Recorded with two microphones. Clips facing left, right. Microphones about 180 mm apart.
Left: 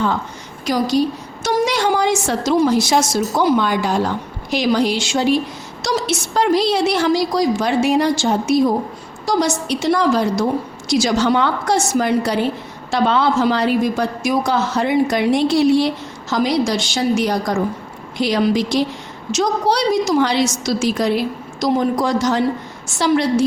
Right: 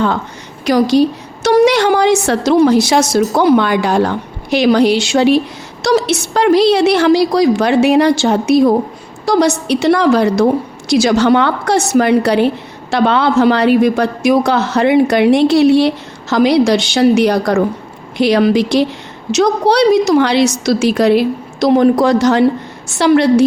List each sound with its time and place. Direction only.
0.6 s a woman's voice: 70° right (ahead or behind)